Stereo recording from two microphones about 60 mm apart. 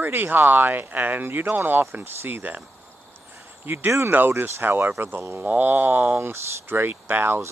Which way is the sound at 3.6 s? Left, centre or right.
Right.